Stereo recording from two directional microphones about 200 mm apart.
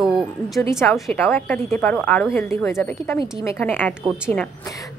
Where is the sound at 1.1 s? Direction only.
10° left (ahead or behind).